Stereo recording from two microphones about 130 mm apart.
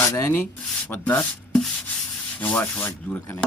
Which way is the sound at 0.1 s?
20° left (ahead or behind).